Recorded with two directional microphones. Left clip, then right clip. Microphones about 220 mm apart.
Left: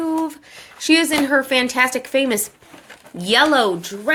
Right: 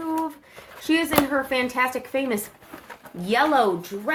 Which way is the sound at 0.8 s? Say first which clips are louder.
Left 5 dB; 40° left (ahead or behind).